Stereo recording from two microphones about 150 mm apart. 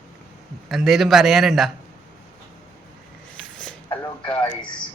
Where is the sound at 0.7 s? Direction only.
Centre (ahead or behind).